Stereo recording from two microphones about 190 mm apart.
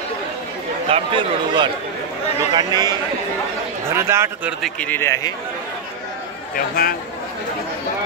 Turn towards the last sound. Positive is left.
turn(degrees=50)  # may be behind; listen again after turning